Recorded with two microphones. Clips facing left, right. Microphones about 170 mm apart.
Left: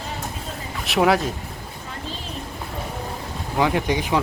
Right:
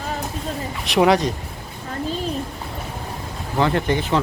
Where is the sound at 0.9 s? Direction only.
Centre (ahead or behind).